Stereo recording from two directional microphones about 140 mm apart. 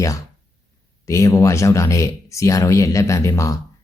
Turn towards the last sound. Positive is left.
turn(degrees=20)  # may be behind; listen again after turning